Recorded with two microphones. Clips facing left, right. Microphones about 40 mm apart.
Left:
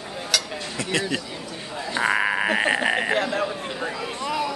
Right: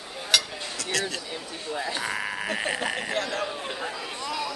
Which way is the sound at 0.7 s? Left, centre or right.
Left.